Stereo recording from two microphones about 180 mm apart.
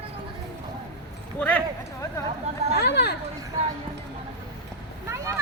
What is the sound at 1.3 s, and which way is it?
Clip-clop, 10° left (ahead or behind).